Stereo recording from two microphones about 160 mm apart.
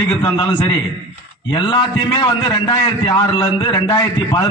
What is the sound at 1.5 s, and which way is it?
A man's voice, 30° left (ahead or behind).